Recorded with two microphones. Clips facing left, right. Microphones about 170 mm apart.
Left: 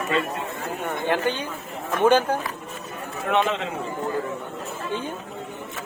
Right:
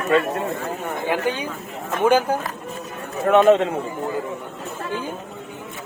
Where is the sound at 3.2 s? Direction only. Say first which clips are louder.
Right 9 dB; 45° right (ahead or behind).